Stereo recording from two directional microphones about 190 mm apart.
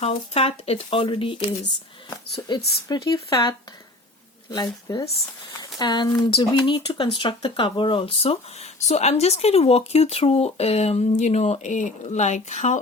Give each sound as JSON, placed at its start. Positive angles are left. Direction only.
{"t": 0.0, "sound": "speech", "side_deg": 30}
{"t": 2.9, "sound": "speech", "side_deg": 20}